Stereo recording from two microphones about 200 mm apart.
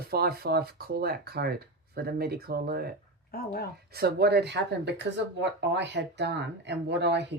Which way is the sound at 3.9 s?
55° right (ahead or behind).